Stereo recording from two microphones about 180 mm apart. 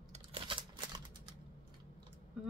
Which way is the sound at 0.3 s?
25° right (ahead or behind).